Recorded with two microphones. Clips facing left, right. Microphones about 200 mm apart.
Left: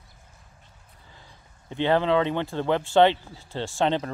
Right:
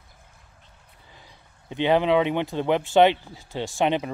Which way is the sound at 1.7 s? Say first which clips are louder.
Right 2 dB; 15° right (ahead or behind).